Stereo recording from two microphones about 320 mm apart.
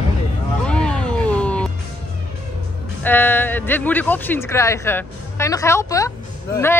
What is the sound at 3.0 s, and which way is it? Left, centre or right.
Speech, centre.